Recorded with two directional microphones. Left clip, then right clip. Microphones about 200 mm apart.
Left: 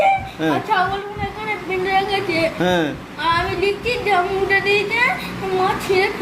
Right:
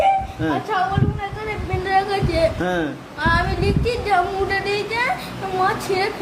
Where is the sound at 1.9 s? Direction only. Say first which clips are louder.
Right 1 dB; 15° right (ahead or behind).